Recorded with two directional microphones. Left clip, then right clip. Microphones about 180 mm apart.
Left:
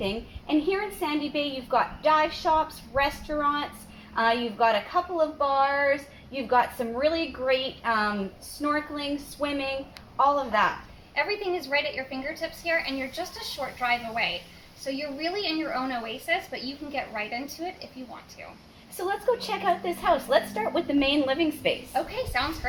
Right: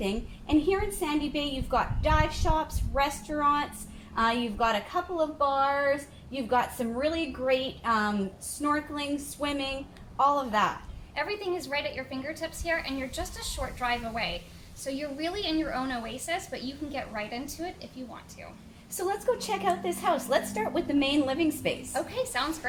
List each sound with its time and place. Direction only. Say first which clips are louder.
0.0 s a woman's voice: left 2 dB; 10° left (ahead or behind)
11.1 s a woman's voice: left 4 dB; 30° right (ahead or behind)
18.9 s a woman's voice: left 2 dB; 10° left (ahead or behind)
21.9 s a woman's voice: left 2 dB; 25° right (ahead or behind)